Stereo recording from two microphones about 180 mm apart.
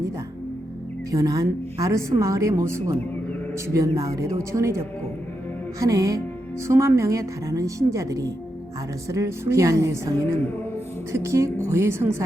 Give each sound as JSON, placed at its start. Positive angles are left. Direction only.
{"t": 1.1, "sound": "speech", "side_deg": -20}
{"t": 5.8, "sound": "speech", "side_deg": -20}